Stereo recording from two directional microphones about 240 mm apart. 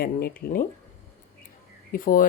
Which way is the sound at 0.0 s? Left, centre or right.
Left.